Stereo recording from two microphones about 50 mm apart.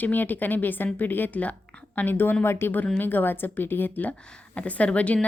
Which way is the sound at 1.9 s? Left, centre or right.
Left.